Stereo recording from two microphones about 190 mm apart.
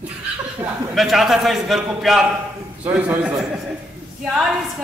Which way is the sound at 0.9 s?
Centre (ahead or behind).